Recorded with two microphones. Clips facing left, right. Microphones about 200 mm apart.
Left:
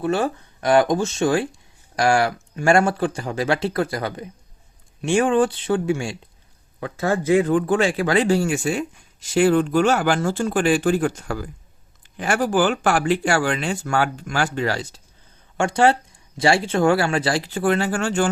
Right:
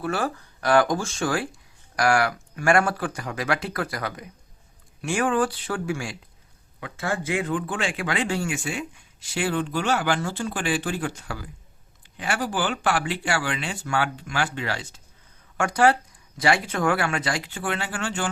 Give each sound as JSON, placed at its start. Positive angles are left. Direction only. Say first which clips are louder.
{"t": 0.0, "sound": "speech", "louder": "left 5 dB", "side_deg": 20}
{"t": 6.7, "sound": "speech", "louder": "left 6 dB", "side_deg": 40}
{"t": 15.5, "sound": "speech", "louder": "left 3 dB", "side_deg": 25}